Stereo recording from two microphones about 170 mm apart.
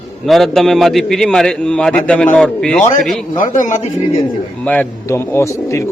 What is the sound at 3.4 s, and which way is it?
Speech, 50° left (ahead or behind).